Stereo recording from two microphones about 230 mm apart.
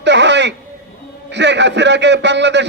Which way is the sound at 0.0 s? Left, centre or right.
Right.